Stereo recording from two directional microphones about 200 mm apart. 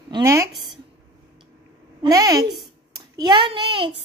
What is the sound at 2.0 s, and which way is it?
A woman's voice, 20° right (ahead or behind).